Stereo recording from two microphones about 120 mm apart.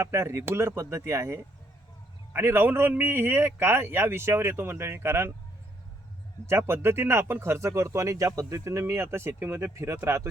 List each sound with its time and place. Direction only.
0.0 s speech: 25° right (ahead or behind)
6.4 s speech: 20° right (ahead or behind)